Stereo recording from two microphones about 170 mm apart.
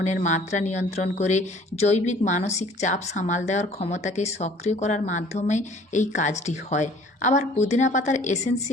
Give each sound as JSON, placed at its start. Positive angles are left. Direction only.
{"t": 0.0, "sound": "speech", "side_deg": 45}